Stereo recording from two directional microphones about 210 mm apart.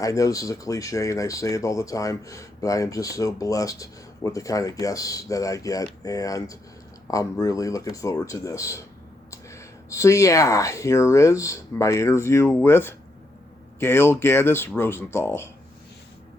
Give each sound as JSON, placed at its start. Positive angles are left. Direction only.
{"t": 0.0, "sound": "speech", "side_deg": 15}